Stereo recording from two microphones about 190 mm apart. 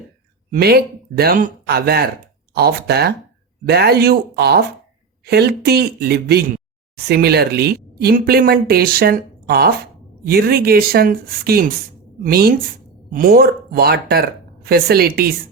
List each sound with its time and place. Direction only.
0.5 s speech: 55° right (ahead or behind)